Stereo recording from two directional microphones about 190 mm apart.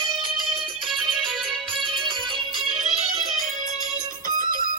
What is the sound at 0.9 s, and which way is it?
Music, 25° right (ahead or behind).